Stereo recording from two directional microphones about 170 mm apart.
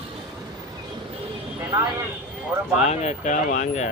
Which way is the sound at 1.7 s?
20° right (ahead or behind).